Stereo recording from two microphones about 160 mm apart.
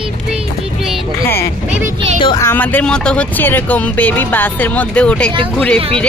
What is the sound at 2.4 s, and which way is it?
Speech, 10° left (ahead or behind).